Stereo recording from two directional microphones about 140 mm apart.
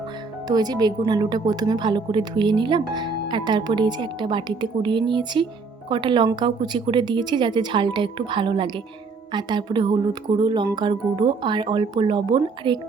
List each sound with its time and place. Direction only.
0.4 s speech: 30° right (ahead or behind)